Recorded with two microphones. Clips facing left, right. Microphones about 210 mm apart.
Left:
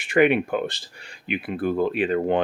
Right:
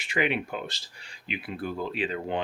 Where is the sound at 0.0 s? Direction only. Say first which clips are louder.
Left 10 dB; 55° left (ahead or behind).